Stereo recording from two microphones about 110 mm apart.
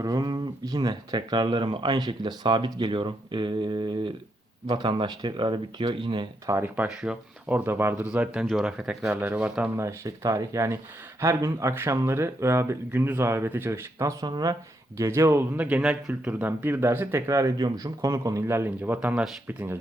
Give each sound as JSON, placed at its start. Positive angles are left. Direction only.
{"t": 0.0, "sound": "speech", "side_deg": -35}
{"t": 6.4, "sound": "speech", "side_deg": -30}
{"t": 6.7, "sound": "speech", "side_deg": -10}
{"t": 9.7, "sound": "speech", "side_deg": -25}
{"t": 14.9, "sound": "speech", "side_deg": -25}
{"t": 18.8, "sound": "speech", "side_deg": -15}